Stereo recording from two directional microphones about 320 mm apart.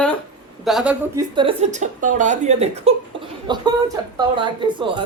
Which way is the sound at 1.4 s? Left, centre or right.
Centre.